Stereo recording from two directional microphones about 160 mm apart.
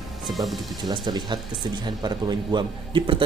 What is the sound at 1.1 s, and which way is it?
Speech, 25° right (ahead or behind).